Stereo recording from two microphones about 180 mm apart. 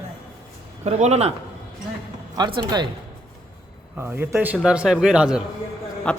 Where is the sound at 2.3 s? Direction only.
25° right (ahead or behind).